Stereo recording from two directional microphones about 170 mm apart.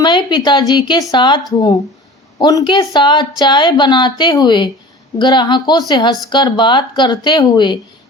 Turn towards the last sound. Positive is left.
turn(degrees=25)  # may be behind; listen again after turning